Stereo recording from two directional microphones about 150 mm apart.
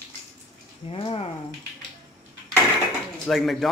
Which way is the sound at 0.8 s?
35° left (ahead or behind).